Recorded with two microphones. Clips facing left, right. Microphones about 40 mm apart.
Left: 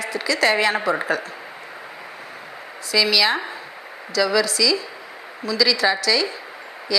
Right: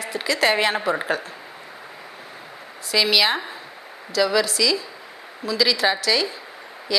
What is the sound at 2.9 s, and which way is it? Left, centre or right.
A woman's voice, centre.